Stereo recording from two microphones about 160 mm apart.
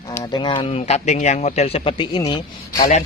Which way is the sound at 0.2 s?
30° left (ahead or behind).